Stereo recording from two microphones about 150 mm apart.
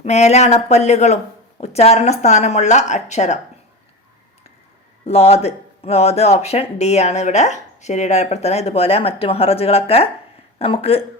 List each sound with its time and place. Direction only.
0.0 s speech: 45° left (ahead or behind)
5.0 s speech: 45° left (ahead or behind)